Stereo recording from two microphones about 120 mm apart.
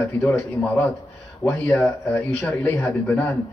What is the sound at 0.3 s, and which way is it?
A man's voice, 15° left (ahead or behind).